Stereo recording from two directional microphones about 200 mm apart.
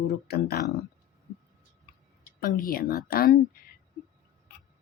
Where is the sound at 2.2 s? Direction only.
45° left (ahead or behind).